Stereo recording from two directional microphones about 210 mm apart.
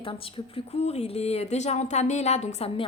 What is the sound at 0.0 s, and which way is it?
Speech, 25° left (ahead or behind).